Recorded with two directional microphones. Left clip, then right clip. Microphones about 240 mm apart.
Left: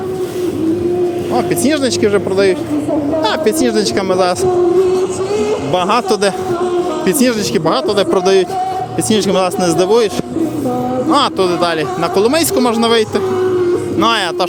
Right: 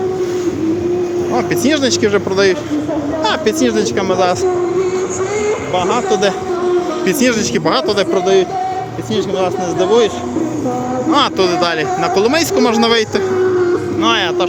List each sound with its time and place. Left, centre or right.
1.4 s speech: centre
3.2 s speech: centre
5.7 s speech: left
7.1 s speech: centre
8.1 s speech: left
11.1 s speech: centre